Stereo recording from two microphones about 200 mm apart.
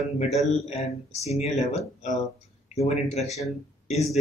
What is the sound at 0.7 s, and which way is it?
Speech, 35° left (ahead or behind).